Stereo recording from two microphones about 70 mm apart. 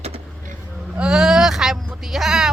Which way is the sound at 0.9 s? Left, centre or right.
Centre.